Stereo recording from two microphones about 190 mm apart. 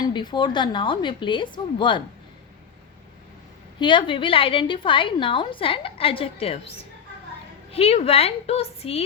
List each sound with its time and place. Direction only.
0.0 s a woman's voice: 25° left (ahead or behind)
3.8 s a woman's voice: 25° left (ahead or behind)
7.7 s a woman's voice: 30° left (ahead or behind)